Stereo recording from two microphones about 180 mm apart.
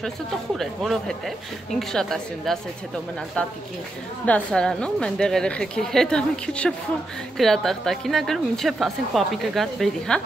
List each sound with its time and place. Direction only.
0.6 s a woman's voice: centre (ahead or behind)